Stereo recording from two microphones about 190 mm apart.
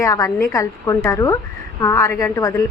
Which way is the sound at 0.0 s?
15° left (ahead or behind).